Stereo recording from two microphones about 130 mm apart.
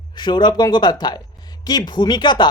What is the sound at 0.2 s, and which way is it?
Speech, 35° left (ahead or behind).